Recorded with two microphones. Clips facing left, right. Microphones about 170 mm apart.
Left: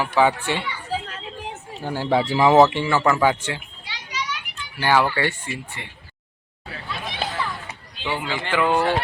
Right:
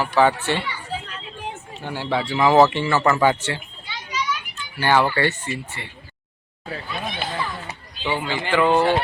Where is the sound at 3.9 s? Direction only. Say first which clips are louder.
Right 4 dB; 85° left.